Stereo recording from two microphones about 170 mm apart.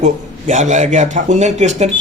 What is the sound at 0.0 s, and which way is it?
Speech, 45° right (ahead or behind).